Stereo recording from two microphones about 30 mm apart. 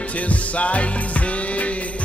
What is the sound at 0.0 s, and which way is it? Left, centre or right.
Music, left.